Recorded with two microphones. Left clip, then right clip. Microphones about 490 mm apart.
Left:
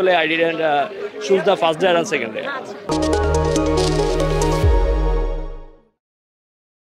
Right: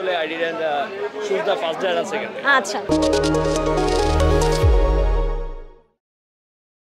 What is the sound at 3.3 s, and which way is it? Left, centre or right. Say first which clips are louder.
Music: left 1 dB; centre.